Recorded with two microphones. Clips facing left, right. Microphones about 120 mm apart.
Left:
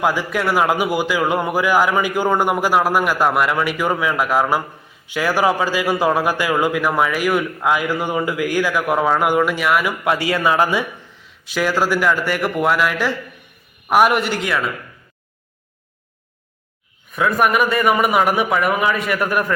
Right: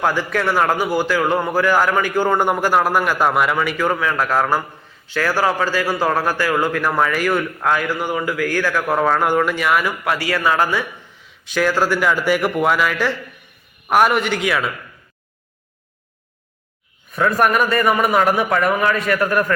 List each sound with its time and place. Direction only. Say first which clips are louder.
0.0 s a man's voice: even; 10° left (ahead or behind)
10.0 s a man's voice: left 2 dB; 20° left (ahead or behind)
11.2 s a man's voice: right 2 dB; centre (ahead or behind)
17.2 s a man's voice: even; 5° left (ahead or behind)